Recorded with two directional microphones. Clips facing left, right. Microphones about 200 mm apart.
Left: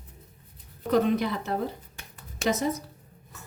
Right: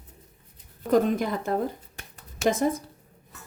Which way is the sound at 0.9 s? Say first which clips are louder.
Right 1 dB; 45° right (ahead or behind).